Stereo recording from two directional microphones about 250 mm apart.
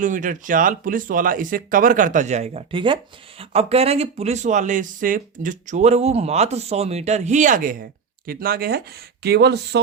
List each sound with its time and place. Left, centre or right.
0.0 s speech: right